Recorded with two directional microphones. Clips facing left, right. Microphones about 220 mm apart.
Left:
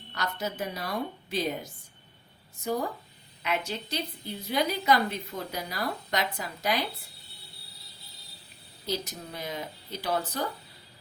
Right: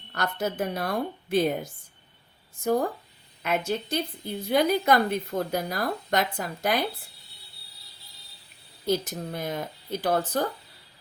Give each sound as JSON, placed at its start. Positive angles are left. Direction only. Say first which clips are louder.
{"t": 0.1, "sound": "a woman's voice", "louder": "right 5 dB", "side_deg": -50}
{"t": 3.7, "sound": "a woman's voice", "louder": "right 6 dB", "side_deg": -50}
{"t": 8.9, "sound": "a woman's voice", "louder": "right 7 dB", "side_deg": -50}